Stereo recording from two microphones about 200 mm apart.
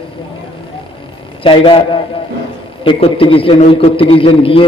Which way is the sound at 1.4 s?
25° left (ahead or behind).